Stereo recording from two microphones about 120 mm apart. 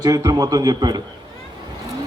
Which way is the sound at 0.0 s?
30° right (ahead or behind).